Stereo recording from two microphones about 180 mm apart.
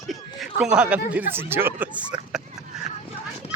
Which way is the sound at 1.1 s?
10° right (ahead or behind).